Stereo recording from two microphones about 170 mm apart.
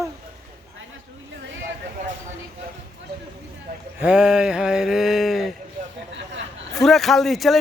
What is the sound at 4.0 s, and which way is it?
Speech, 5° right (ahead or behind).